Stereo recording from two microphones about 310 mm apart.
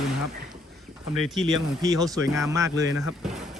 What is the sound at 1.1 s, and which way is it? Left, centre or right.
Speech, centre.